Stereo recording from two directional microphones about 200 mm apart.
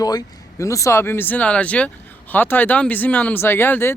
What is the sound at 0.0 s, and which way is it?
Speech, 20° left (ahead or behind).